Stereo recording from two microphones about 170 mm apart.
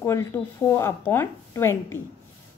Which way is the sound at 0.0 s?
15° left (ahead or behind).